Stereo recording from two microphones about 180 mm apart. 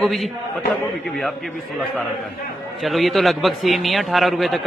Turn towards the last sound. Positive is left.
turn(degrees=0)  # may be behind; listen again after turning